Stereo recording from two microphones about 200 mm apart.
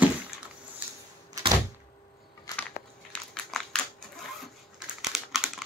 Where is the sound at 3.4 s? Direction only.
Centre (ahead or behind).